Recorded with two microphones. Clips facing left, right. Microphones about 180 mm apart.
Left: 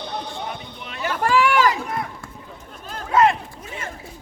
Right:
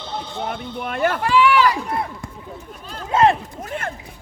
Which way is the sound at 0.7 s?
55° right (ahead or behind).